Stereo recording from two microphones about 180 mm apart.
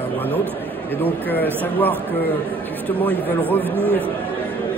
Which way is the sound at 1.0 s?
10° left (ahead or behind).